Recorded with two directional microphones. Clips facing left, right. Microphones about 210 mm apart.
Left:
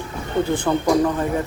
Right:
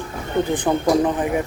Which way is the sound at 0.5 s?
20° right (ahead or behind).